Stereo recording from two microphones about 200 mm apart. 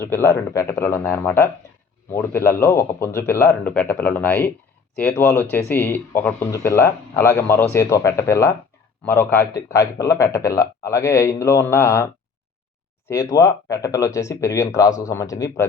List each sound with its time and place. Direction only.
0.0 s speech: 15° left (ahead or behind)
13.1 s speech: 15° left (ahead or behind)